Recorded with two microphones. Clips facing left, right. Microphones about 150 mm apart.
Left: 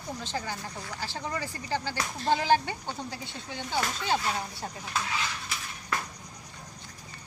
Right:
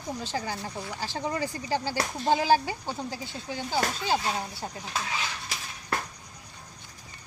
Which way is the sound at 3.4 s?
35° right (ahead or behind).